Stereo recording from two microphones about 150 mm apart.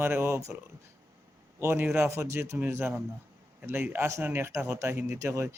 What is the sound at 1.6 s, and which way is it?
A man's voice, 15° right (ahead or behind).